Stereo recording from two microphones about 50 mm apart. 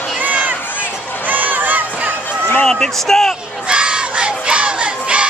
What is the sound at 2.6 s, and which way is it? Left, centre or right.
Speech, centre.